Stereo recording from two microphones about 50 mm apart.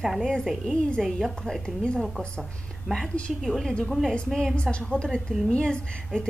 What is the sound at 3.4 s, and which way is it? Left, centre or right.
Speech, centre.